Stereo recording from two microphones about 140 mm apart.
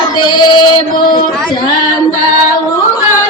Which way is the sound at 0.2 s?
35° left (ahead or behind).